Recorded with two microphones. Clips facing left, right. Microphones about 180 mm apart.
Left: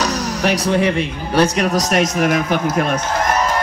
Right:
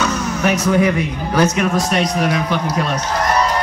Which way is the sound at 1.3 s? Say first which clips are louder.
Left 1 dB; 35° left (ahead or behind).